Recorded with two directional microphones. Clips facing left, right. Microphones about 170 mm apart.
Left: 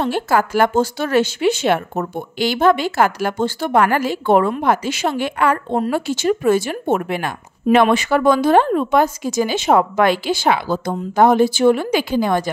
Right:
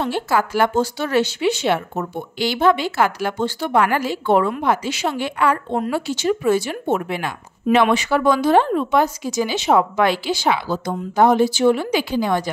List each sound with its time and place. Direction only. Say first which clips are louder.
0.0 s speech: left 2 dB; 50° left (ahead or behind)